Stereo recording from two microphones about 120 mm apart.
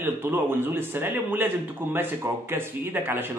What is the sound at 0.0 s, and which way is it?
Speech, 20° right (ahead or behind).